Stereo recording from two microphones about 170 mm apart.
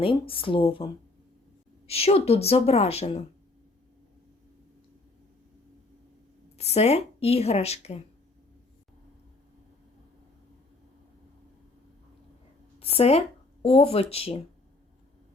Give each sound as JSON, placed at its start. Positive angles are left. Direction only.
{"t": 0.0, "sound": "speech", "side_deg": 30}
{"t": 1.9, "sound": "speech", "side_deg": 35}
{"t": 6.6, "sound": "speech", "side_deg": 40}
{"t": 12.8, "sound": "speech", "side_deg": 35}